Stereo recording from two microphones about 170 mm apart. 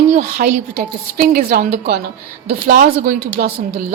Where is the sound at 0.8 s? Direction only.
65° right (ahead or behind); by 3.1 s 50° right (ahead or behind).